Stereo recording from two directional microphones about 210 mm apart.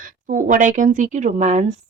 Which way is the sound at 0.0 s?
40° right (ahead or behind).